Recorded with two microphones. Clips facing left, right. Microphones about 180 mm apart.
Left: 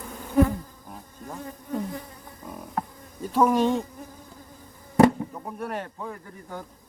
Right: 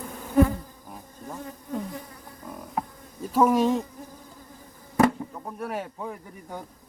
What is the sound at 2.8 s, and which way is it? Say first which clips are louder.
Insect: even; 10° right (ahead or behind).